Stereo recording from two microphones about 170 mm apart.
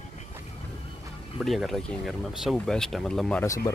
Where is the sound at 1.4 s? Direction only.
Centre (ahead or behind).